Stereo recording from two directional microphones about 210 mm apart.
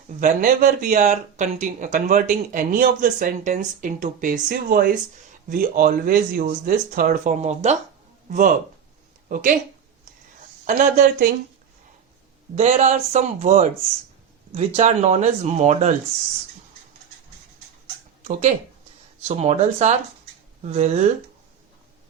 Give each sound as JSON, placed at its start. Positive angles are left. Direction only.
{"t": 0.2, "sound": "speech", "side_deg": -40}
{"t": 10.7, "sound": "speech", "side_deg": -35}
{"t": 12.5, "sound": "speech", "side_deg": -30}
{"t": 14.8, "sound": "speech", "side_deg": -35}
{"t": 18.2, "sound": "speech", "side_deg": -35}